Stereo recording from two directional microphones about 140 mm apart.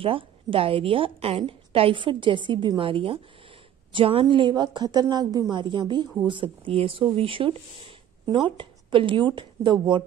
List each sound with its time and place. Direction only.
0.0 s a woman's voice: 40° right (ahead or behind)